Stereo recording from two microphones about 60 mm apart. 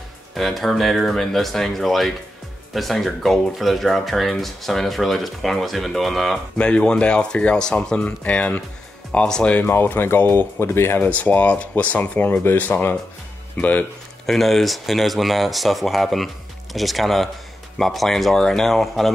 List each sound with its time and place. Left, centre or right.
0.3 s speech: centre
6.6 s speech: centre
9.5 s speech: left
11.0 s speech: left
14.2 s speech: centre